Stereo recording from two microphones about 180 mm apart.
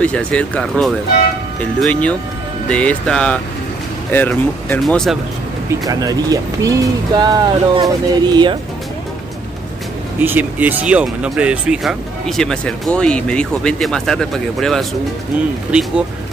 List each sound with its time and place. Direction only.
0.0 s speech: 5° left (ahead or behind)
5.7 s speech: 20° right (ahead or behind)
10.2 s speech: 10° right (ahead or behind)